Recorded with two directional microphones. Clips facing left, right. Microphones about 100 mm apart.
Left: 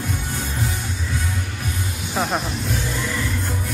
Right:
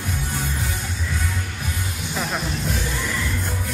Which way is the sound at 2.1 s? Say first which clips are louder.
Left 5 dB; 25° left (ahead or behind).